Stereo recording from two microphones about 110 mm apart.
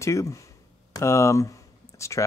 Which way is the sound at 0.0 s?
25° left (ahead or behind).